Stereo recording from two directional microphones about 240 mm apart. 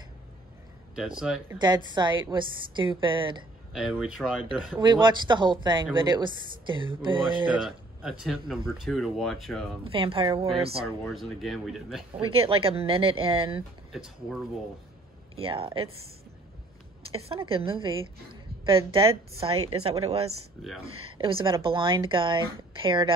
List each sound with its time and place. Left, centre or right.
0.9 s speech: centre
2.0 s speech: centre
3.7 s speech: centre
4.7 s speech: centre
7.5 s a man's voice: centre
9.8 s speech: right
11.1 s speech: centre
12.1 s speech: right
13.9 s speech: centre
15.3 s speech: right
17.1 s speech: right